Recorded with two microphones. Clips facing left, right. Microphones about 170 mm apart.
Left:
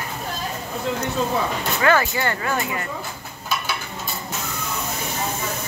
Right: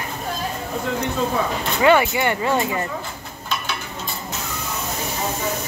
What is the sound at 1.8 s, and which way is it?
Speech, 20° right (ahead or behind).